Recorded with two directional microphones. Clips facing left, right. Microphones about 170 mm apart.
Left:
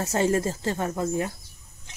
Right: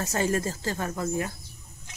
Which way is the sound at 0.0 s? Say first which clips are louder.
Left 3 dB; 25° left (ahead or behind).